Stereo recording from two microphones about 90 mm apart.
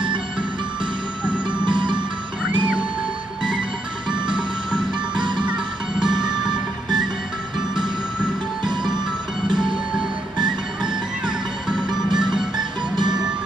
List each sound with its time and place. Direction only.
1.2 s music: 15° right (ahead or behind)
1.7 s music: 60° right (ahead or behind)
4.3 s music: 10° right (ahead or behind)
9.6 s music: 10° right (ahead or behind)
12.9 s music: 55° right (ahead or behind)